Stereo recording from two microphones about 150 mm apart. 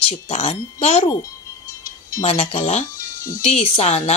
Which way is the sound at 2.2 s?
45° left (ahead or behind).